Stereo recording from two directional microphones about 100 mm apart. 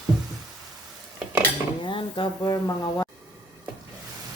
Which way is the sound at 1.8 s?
55° left (ahead or behind).